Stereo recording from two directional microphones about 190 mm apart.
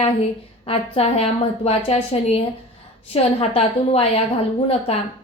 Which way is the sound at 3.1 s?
30° left (ahead or behind).